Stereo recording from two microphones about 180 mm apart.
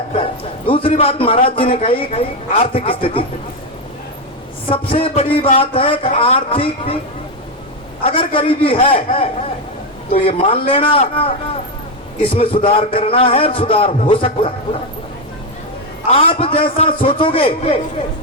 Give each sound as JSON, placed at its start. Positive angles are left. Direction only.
{"t": 0.7, "sound": "a man's voice", "side_deg": 30}
{"t": 4.7, "sound": "a man's voice", "side_deg": 30}
{"t": 8.0, "sound": "a man's voice", "side_deg": 30}
{"t": 12.3, "sound": "a man's voice", "side_deg": 30}
{"t": 16.0, "sound": "a man's voice", "side_deg": 30}